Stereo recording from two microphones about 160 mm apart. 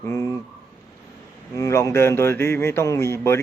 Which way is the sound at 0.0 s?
20° left (ahead or behind).